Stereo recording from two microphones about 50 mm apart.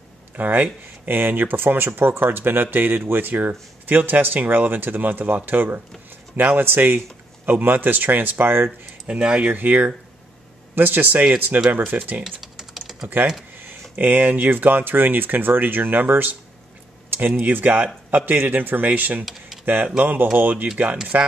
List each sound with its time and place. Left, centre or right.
0.4 s speech: right
8.6 s speech: right
9.5 s speech: right
12.3 s typing: centre
13.6 s speech: right